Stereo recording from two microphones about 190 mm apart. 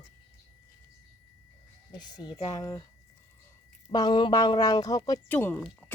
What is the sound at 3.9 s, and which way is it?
Speech, 20° left (ahead or behind).